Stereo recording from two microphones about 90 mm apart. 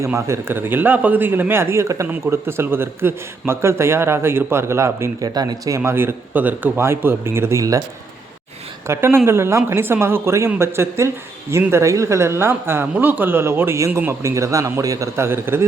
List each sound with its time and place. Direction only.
0.0 s a man's voice: 30° right (ahead or behind)
5.2 s speech: 50° right (ahead or behind)
5.7 s a man's voice: 30° right (ahead or behind)
8.9 s a man's voice: 25° right (ahead or behind)